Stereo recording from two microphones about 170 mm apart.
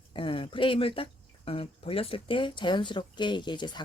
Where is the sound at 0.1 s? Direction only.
30° left (ahead or behind).